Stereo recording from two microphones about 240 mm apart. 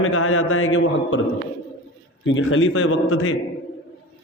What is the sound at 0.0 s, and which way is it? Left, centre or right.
A man's voice, left.